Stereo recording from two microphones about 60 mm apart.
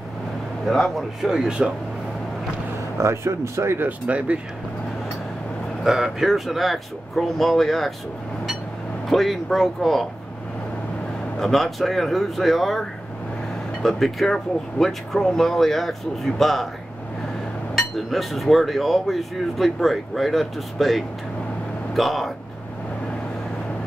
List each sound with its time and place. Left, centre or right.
0.7 s speech: centre
3.0 s speech: right
5.9 s speech: centre
9.1 s speech: centre
11.3 s speech: centre
13.8 s speech: centre
17.7 s speech: centre